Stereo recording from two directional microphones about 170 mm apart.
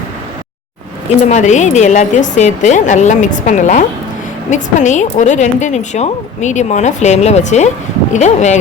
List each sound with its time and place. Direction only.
1.3 s a woman's voice: 45° left (ahead or behind)